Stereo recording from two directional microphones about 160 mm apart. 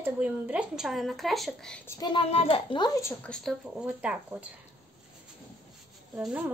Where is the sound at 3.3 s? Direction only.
Centre (ahead or behind).